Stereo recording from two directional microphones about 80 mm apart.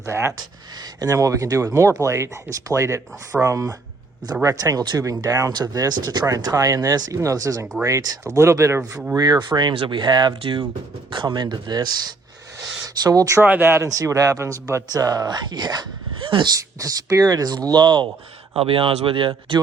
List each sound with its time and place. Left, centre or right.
0.0 s speech: right
9.1 s speech: right
11.1 s speech: right
13.0 s speech: right
13.4 s speech: right
13.8 s speech: right
14.8 s speech: right
16.6 s speech: right
18.7 s speech: right